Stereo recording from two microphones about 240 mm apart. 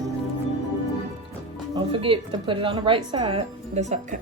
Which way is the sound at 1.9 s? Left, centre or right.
Right.